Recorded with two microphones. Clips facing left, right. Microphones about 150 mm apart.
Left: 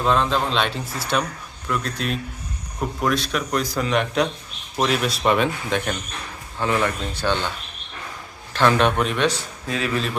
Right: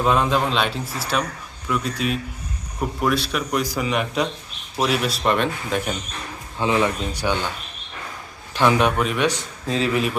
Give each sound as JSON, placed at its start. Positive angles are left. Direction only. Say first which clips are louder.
{"t": 0.0, "sound": "a man's voice", "louder": "right 1 dB", "side_deg": -10}
{"t": 6.6, "sound": "speech", "louder": "right 2 dB", "side_deg": -15}
{"t": 8.5, "sound": "speech", "louder": "even", "side_deg": -10}
{"t": 9.6, "sound": "a man's voice", "louder": "right 4 dB", "side_deg": -30}